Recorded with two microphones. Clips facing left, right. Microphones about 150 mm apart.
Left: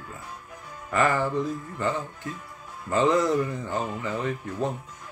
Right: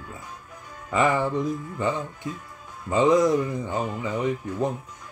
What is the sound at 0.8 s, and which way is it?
Speech, 15° right (ahead or behind).